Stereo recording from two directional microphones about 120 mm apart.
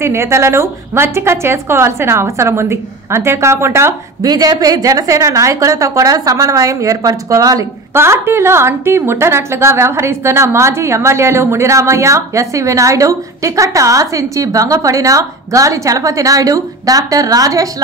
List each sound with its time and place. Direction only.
0.0 s a woman's voice: 20° right (ahead or behind)
4.3 s a woman's voice: 30° right (ahead or behind)